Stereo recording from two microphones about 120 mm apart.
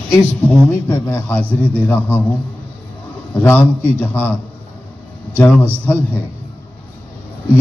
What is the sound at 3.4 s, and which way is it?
Speech, 15° left (ahead or behind).